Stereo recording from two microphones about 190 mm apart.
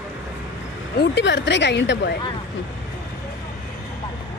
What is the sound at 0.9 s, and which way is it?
A woman's voice, 70° left (ahead or behind).